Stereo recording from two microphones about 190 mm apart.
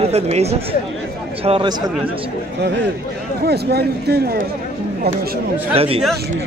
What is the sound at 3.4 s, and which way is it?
Speech, 55° right (ahead or behind).